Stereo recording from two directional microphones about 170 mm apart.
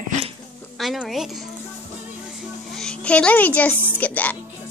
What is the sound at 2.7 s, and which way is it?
A woman's voice, 5° left (ahead or behind).